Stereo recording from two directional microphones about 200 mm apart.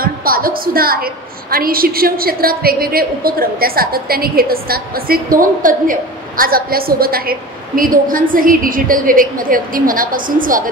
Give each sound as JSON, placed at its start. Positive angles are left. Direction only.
{"t": 0.0, "sound": "a woman's voice", "side_deg": -45}